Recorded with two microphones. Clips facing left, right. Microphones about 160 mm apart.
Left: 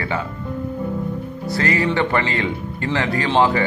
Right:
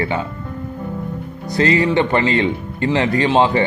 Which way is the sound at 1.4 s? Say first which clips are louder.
Right 4 dB; 20° right (ahead or behind).